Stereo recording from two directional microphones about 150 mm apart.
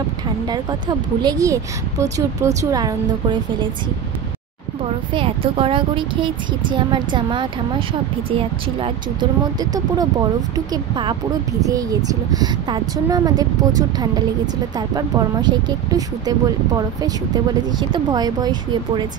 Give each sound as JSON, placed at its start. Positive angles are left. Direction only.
{"t": 0.5, "sound": "speech", "side_deg": -30}
{"t": 5.1, "sound": "speech", "side_deg": -35}